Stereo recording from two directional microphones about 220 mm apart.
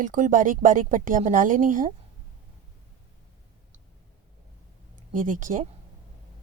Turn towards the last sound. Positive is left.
turn(degrees=-35)  # may be behind; listen again after turning